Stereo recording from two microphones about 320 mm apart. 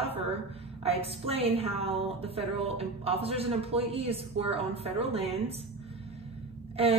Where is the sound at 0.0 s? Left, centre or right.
Centre.